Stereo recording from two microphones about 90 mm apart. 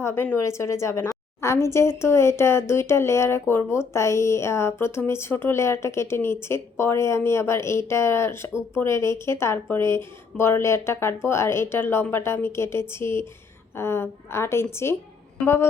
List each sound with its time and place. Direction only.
0.0 s a woman's voice: 25° left (ahead or behind)